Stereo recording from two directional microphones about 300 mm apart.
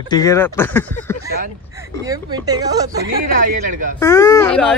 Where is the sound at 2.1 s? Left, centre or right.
Centre.